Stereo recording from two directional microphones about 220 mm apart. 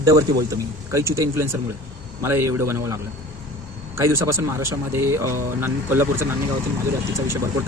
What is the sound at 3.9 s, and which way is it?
Speech, 10° right (ahead or behind).